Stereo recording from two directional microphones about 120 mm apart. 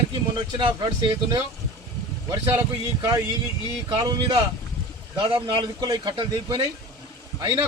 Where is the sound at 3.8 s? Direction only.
35° right (ahead or behind).